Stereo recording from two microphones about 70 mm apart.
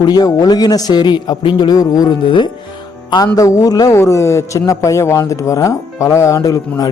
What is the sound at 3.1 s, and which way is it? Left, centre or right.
Speech, left.